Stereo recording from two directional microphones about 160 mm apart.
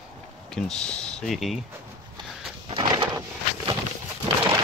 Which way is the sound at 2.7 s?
30° right (ahead or behind).